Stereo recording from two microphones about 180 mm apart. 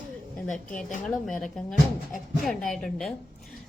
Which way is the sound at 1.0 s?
5° left (ahead or behind).